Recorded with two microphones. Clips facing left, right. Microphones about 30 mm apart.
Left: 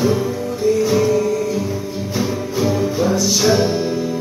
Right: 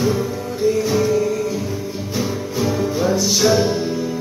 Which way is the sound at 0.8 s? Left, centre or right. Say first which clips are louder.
Left 2 dB; centre.